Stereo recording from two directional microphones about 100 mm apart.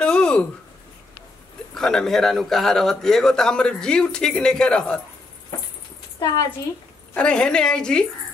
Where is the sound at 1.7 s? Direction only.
5° left (ahead or behind).